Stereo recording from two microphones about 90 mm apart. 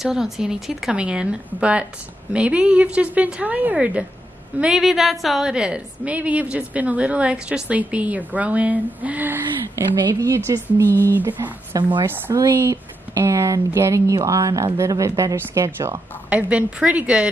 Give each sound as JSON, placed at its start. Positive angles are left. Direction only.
{"t": 0.0, "sound": "a woman's voice", "side_deg": -5}
{"t": 10.2, "sound": "speech", "side_deg": -35}
{"t": 11.1, "sound": "speech", "side_deg": -20}
{"t": 11.7, "sound": "speech", "side_deg": -40}
{"t": 12.4, "sound": "speech", "side_deg": -30}
{"t": 16.3, "sound": "a woman's voice", "side_deg": -15}